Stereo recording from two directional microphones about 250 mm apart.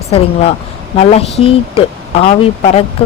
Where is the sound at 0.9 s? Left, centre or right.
Left.